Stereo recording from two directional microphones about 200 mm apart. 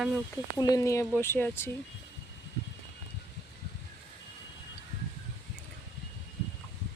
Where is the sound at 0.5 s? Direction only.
20° left (ahead or behind).